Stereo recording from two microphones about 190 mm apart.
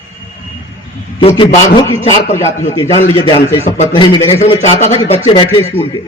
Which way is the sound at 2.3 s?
15° left (ahead or behind).